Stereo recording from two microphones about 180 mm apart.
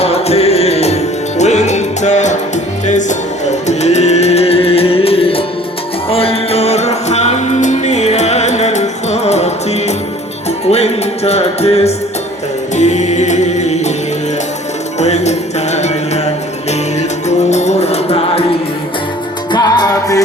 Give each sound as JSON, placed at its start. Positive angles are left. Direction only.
{"t": 0.0, "sound": "music", "side_deg": 35}
{"t": 14.9, "sound": "music", "side_deg": 40}
{"t": 19.5, "sound": "music", "side_deg": 25}